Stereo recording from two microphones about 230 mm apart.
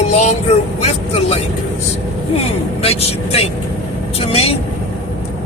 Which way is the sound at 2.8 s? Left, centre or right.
Left.